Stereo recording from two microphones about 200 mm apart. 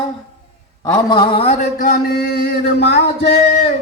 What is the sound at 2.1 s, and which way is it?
Music, 55° left (ahead or behind).